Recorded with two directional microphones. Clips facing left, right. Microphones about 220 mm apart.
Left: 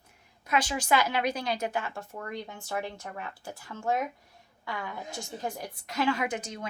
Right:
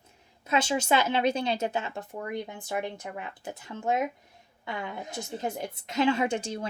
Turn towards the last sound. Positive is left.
turn(degrees=-30)  # may be behind; listen again after turning